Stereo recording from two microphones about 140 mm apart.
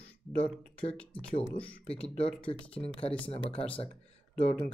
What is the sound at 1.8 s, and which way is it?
Speech, 45° left (ahead or behind).